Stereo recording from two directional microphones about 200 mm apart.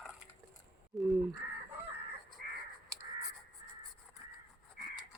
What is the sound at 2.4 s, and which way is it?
Crow, 45° right (ahead or behind).